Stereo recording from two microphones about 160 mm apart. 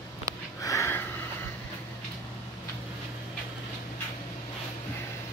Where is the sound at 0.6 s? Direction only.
15° left (ahead or behind).